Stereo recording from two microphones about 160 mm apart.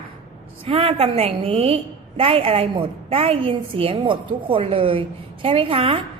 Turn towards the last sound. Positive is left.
turn(degrees=-35)  # may be behind; listen again after turning